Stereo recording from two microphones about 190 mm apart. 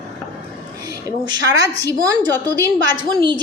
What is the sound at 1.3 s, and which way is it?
A woman's voice, 20° right (ahead or behind).